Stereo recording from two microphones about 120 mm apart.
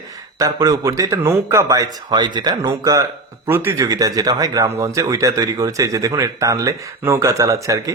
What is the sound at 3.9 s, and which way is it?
Speech, 30° right (ahead or behind).